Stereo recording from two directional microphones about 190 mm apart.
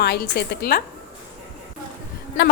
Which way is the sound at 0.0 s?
60° left (ahead or behind).